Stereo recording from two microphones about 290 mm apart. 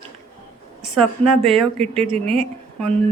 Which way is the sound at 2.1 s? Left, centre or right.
Centre.